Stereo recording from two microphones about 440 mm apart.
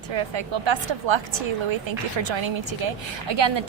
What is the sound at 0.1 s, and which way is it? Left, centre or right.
A woman's voice, right.